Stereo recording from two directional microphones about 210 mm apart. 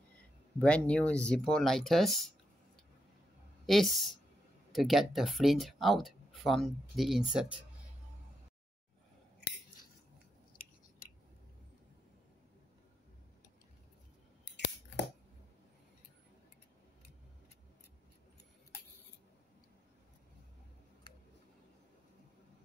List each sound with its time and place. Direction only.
0.6 s speech: 5° left (ahead or behind)
3.6 s speech: centre (ahead or behind)
14.4 s scissors: 55° left (ahead or behind)